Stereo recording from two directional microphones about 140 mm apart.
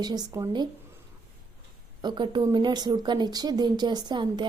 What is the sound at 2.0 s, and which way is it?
A woman's voice, 35° right (ahead or behind).